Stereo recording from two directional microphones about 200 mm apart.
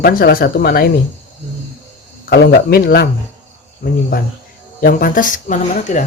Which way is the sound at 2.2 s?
50° left (ahead or behind).